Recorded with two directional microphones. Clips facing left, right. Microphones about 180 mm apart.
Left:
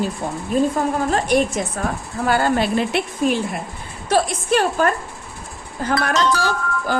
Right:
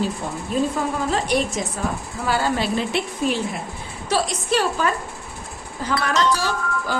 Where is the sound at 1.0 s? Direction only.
50° left (ahead or behind).